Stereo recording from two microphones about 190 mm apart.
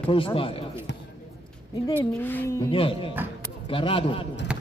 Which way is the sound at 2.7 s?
30° left (ahead or behind).